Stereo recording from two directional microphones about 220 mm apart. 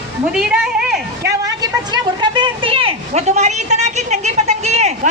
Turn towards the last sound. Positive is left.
turn(degrees=-30)  # may be behind; listen again after turning